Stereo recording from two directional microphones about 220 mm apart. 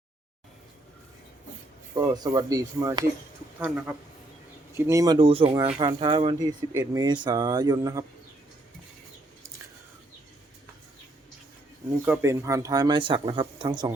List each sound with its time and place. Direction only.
2.0 s speech: 20° right (ahead or behind)
12.0 s speech: 10° right (ahead or behind)